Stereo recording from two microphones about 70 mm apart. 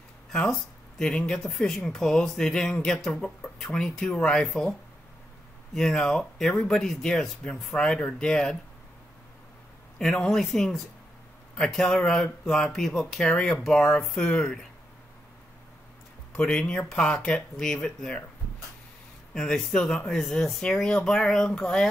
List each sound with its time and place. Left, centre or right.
0.5 s speech: centre
5.8 s speech: centre
9.9 s speech: centre
13.3 s speech: centre
16.3 s speech: centre
19.3 s speech: centre